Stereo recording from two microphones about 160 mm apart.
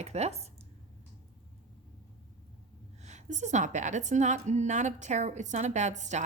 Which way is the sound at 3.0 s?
45° right (ahead or behind).